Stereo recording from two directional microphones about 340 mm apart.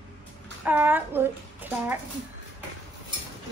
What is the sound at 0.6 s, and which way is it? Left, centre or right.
A child's voice, centre.